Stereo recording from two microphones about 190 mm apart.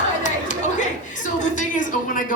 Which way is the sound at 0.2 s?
40° left (ahead or behind).